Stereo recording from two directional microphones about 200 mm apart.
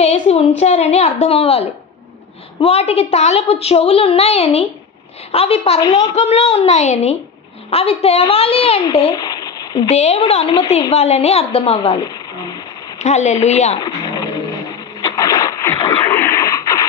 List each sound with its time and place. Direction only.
0.0 s a woman's voice: 30° left (ahead or behind)
9.8 s a woman's voice: 35° left (ahead or behind)
10.9 s a woman's voice: 35° left (ahead or behind)
13.0 s a woman's voice: 35° left (ahead or behind)
13.7 s a sound: 20° left (ahead or behind)
16.0 s radio: 10° left (ahead or behind)